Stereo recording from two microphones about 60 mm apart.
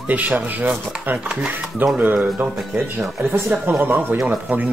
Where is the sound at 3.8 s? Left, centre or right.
Right.